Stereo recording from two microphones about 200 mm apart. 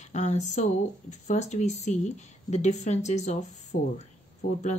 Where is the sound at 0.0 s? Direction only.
35° left (ahead or behind).